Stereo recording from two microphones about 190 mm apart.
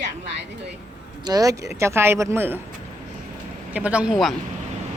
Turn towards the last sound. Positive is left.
turn(degrees=0)  # may be behind; listen again after turning